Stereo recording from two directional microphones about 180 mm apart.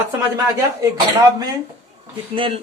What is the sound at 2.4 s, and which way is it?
Speech, 30° right (ahead or behind).